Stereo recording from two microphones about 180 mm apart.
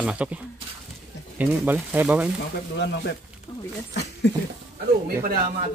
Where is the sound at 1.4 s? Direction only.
10° right (ahead or behind).